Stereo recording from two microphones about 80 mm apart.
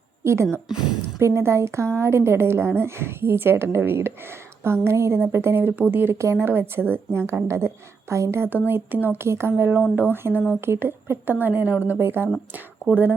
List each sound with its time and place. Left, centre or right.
0.7 s a woman's voice: centre
1.2 s speech: right